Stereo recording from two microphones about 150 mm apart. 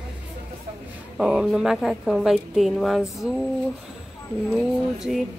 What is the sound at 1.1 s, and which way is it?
A woman's voice, 5° right (ahead or behind).